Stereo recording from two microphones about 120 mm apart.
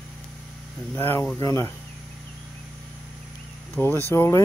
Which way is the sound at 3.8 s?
20° left (ahead or behind).